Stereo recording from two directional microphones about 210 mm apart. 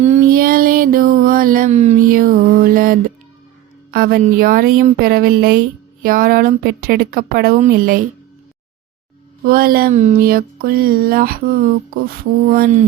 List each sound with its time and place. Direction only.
0.0 s music: 35° right (ahead or behind)
3.9 s a woman's voice: 45° right (ahead or behind)
9.4 s a woman's voice: 45° right (ahead or behind)
12.5 s a woman's voice: 45° right (ahead or behind)